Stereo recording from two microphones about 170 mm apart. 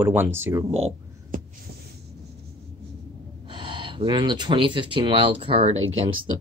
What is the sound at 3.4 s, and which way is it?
Speech, 30° right (ahead or behind).